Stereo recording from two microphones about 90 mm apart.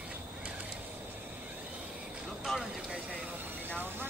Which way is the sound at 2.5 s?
5° left (ahead or behind).